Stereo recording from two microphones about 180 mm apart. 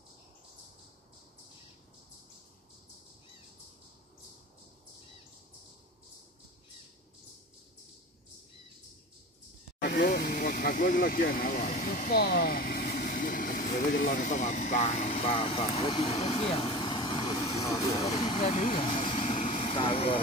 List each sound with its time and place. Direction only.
9.8 s vehicle: 55° left (ahead or behind)
13.7 s speech: 55° left (ahead or behind); by 20.2 s 30° left (ahead or behind)